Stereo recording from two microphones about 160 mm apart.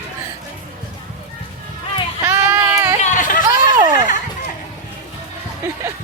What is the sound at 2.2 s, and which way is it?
Child singing, 15° right (ahead or behind).